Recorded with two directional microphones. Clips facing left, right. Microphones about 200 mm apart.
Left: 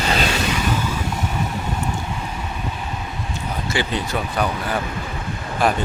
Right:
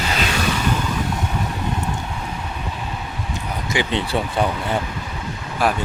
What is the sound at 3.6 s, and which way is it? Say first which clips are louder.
Speech: right 2 dB; 15° right (ahead or behind).